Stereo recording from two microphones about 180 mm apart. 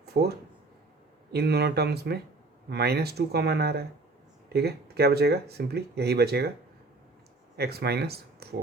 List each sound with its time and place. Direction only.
0.0 s a sound: 65° right (ahead or behind)
1.3 s speech: 65° right (ahead or behind)
7.5 s speech: 60° right (ahead or behind)